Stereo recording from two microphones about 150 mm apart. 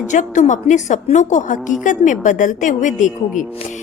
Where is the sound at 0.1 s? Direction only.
55° left (ahead or behind).